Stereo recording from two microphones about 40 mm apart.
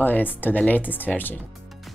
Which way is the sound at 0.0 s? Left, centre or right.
Left.